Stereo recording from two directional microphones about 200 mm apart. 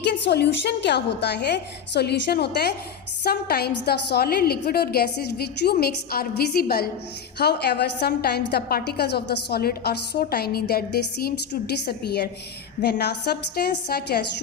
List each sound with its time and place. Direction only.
0.0 s a woman's voice: 55° left (ahead or behind)